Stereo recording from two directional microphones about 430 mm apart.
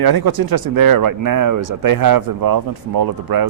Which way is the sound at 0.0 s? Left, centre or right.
Right.